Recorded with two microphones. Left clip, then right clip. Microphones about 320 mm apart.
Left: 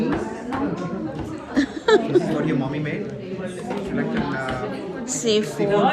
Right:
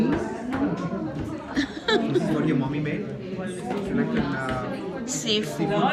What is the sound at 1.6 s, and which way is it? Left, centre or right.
Speech, centre.